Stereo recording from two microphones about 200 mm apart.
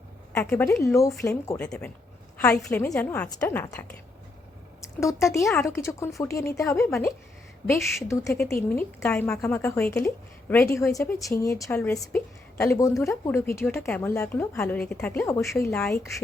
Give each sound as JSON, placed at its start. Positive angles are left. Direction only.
{"t": 0.3, "sound": "a woman's voice", "side_deg": 15}